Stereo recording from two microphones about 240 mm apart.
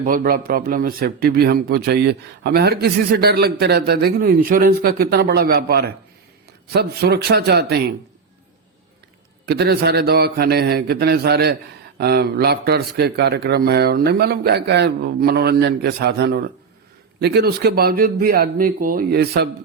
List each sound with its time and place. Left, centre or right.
0.0 s speech: right
9.5 s speech: right